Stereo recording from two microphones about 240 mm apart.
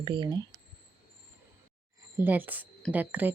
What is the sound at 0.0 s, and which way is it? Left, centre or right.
Speech, centre.